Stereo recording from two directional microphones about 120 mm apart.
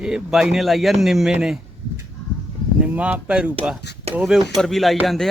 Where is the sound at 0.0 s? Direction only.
5° right (ahead or behind).